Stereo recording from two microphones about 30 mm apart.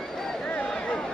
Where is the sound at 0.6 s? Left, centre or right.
Left.